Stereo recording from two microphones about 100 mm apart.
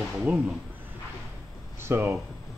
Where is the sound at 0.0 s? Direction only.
Centre (ahead or behind).